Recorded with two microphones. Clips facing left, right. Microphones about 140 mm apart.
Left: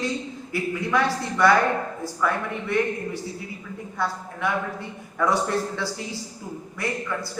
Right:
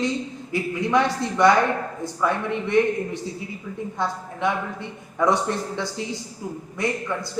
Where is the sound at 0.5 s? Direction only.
20° right (ahead or behind).